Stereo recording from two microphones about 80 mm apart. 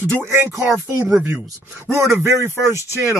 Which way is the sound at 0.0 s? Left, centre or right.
Right.